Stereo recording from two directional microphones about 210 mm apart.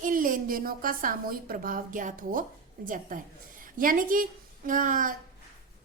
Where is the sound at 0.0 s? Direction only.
40° right (ahead or behind).